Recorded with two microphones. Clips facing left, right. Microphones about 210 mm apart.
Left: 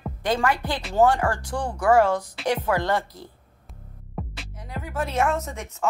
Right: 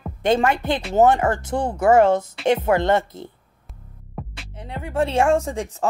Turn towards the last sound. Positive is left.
turn(degrees=-30)  # may be behind; listen again after turning